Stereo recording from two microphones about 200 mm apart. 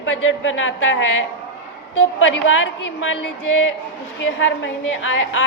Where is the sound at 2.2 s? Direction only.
75° left (ahead or behind).